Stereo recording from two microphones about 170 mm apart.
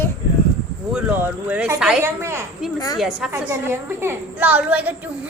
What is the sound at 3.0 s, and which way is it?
Speech, centre (ahead or behind).